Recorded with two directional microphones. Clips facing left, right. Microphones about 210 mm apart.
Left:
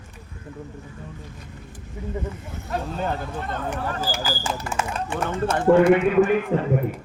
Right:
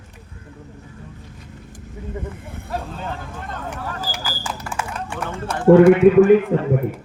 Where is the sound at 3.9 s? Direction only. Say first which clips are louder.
Left 3 dB; 25° left (ahead or behind).